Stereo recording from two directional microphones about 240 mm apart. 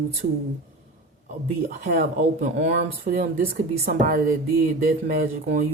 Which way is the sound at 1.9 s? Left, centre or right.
Right.